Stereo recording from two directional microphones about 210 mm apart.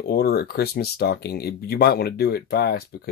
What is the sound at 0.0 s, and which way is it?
Speech, 50° left (ahead or behind).